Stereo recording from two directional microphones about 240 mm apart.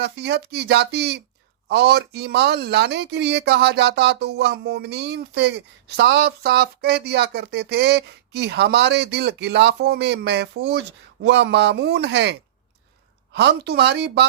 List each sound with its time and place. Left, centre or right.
0.0 s speech: right